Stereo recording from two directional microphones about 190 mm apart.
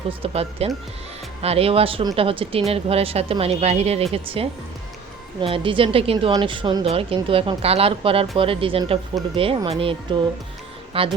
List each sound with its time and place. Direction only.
0.1 s a woman's voice: 30° right (ahead or behind)